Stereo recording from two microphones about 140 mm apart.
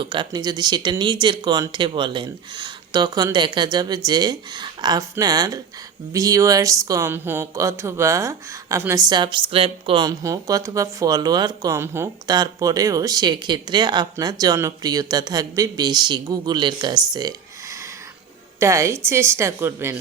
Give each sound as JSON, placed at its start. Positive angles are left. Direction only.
{"t": 0.0, "sound": "speech", "side_deg": -35}
{"t": 9.0, "sound": "speech", "side_deg": -30}